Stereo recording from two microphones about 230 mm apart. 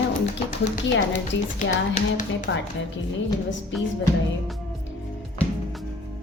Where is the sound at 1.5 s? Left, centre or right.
Left.